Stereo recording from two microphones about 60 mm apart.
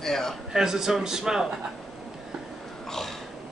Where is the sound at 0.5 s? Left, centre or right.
Centre.